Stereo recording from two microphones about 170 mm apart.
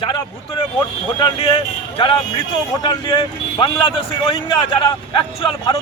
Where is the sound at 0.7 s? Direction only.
30° left (ahead or behind).